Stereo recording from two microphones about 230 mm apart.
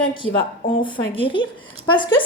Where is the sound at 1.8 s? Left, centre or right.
Left.